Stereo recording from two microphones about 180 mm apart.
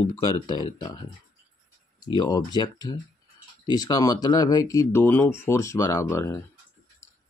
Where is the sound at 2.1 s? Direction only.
20° left (ahead or behind).